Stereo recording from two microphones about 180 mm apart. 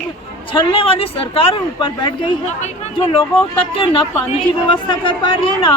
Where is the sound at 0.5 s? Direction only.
30° left (ahead or behind).